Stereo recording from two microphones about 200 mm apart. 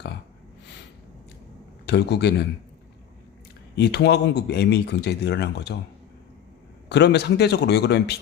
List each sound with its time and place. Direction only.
1.9 s speech: 55° left (ahead or behind)
3.8 s speech: 55° left (ahead or behind)
6.8 s speech: 55° left (ahead or behind)